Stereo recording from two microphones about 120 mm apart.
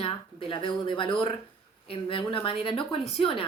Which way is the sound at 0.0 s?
50° left (ahead or behind).